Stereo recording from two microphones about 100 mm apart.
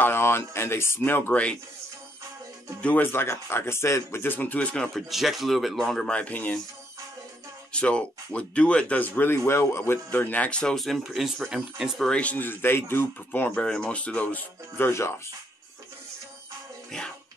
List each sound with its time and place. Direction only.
0.0 s speech: 25° left (ahead or behind)
2.8 s speech: 15° left (ahead or behind)
5.1 s speech: centre (ahead or behind)
6.1 s speech: 15° left (ahead or behind)
7.7 s speech: 10° left (ahead or behind); by 12.1 s 5° right (ahead or behind)
12.1 s speech: 15° left (ahead or behind)
13.7 s speech: 10° left (ahead or behind)
14.9 s speech: 30° left (ahead or behind)